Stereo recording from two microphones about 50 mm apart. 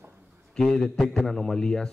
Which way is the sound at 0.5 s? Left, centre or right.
Centre.